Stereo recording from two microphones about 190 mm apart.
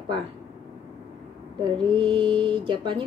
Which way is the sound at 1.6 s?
25° right (ahead or behind).